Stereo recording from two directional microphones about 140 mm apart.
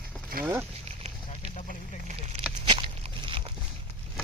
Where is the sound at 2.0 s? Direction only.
55° right (ahead or behind).